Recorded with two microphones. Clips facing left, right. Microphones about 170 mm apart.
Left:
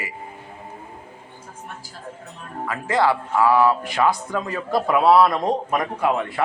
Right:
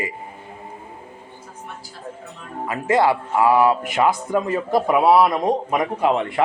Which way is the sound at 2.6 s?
25° right (ahead or behind).